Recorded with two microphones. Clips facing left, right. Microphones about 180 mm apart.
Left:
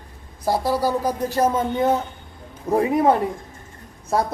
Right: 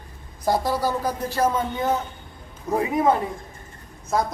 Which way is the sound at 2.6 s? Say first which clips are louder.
Left 4 dB; 35° left (ahead or behind).